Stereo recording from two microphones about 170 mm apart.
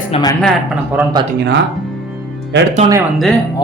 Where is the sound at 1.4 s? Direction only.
80° right.